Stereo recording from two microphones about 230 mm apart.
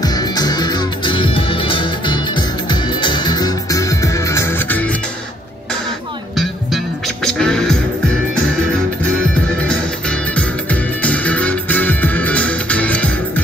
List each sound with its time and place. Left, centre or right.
0.0 s music: centre
7.2 s music: centre
9.7 s music: centre